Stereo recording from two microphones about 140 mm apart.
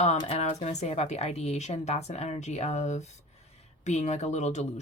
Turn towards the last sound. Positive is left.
turn(degrees=55)  # may be behind; listen again after turning